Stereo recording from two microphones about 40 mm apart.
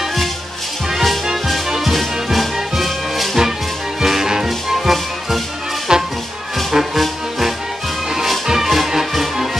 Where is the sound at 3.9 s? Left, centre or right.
Centre.